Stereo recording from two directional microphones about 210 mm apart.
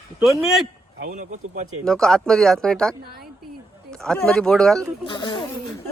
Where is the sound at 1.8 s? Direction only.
5° left (ahead or behind).